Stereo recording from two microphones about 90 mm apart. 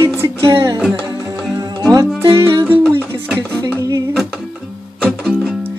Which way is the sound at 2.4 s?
25° right (ahead or behind).